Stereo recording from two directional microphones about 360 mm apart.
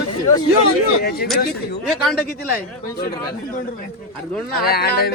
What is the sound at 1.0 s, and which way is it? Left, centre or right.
Speech, left.